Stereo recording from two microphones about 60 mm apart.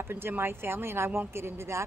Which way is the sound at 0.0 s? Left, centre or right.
Right.